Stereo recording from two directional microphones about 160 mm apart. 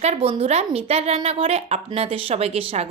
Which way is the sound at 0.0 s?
40° right (ahead or behind).